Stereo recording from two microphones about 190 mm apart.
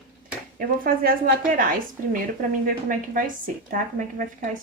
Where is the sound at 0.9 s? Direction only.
50° right (ahead or behind).